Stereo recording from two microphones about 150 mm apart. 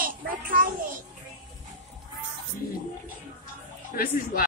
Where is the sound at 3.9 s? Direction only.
85° left.